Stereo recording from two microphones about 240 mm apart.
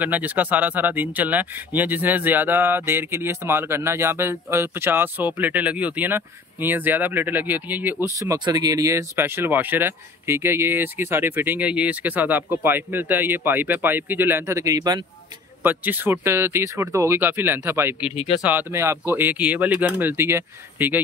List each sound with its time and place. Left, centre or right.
0.0 s speech: centre
18.1 s speech: left
18.4 s speech: centre